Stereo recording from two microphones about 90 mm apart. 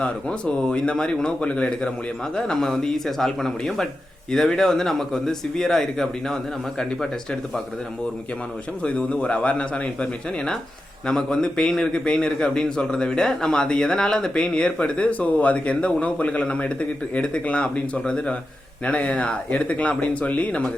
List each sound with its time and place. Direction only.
0.0 s a man's voice: 10° left (ahead or behind)
8.8 s a man's voice: 10° left (ahead or behind)